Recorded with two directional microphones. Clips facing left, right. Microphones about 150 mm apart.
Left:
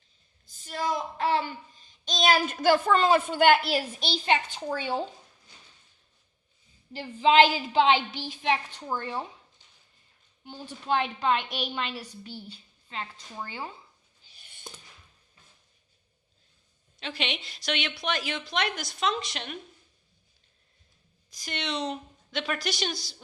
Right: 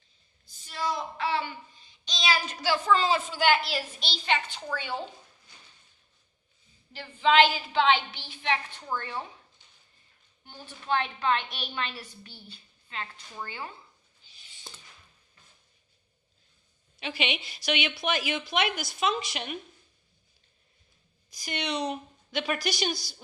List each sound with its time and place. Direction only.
0.4 s child singing: 45° left (ahead or behind)
7.2 s a woman's voice: 35° left (ahead or behind)
8.9 s a woman's voice: 10° left (ahead or behind)
10.8 s a woman's voice: 10° left (ahead or behind)
13.3 s a woman's voice: 15° left (ahead or behind)
14.3 s a sound: 55° left (ahead or behind)
17.0 s a woman's voice: 5° right (ahead or behind)
21.2 s a woman's voice: 5° right (ahead or behind)